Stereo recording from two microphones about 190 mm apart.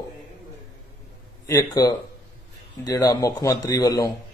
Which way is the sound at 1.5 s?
15° left (ahead or behind).